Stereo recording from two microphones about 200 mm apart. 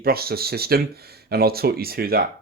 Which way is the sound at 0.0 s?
50° right (ahead or behind).